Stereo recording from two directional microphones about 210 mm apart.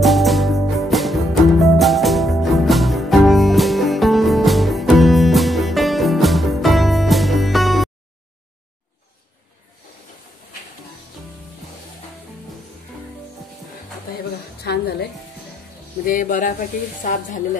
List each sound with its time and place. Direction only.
0.0 s music: centre (ahead or behind)
14.6 s music: 50° left (ahead or behind)
16.1 s speech: 40° left (ahead or behind)